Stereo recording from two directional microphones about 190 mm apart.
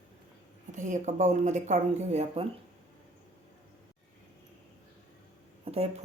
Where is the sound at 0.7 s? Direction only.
40° right (ahead or behind).